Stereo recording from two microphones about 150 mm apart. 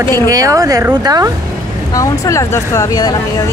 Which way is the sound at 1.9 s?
20° left (ahead or behind).